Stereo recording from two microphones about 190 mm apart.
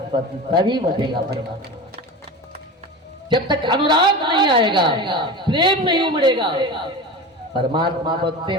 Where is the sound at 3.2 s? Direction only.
25° right (ahead or behind).